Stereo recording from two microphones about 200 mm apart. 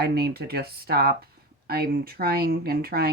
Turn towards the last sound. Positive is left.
turn(degrees=-50)  # may be behind; listen again after turning